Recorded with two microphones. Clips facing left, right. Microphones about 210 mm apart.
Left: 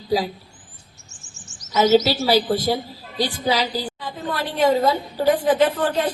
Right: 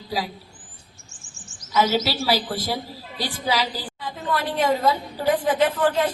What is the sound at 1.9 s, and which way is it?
A woman's voice, 25° left (ahead or behind).